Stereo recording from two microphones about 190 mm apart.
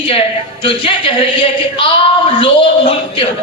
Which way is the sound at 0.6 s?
25° left (ahead or behind).